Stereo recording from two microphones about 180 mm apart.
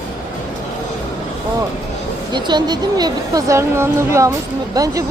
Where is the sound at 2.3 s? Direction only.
25° right (ahead or behind).